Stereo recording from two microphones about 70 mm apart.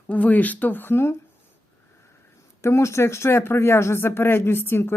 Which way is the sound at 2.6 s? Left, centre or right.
Left.